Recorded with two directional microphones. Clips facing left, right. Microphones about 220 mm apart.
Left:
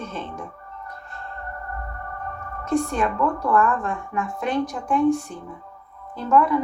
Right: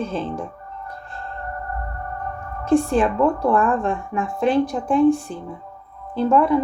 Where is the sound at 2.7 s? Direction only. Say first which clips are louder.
Right 5 dB; 30° right (ahead or behind).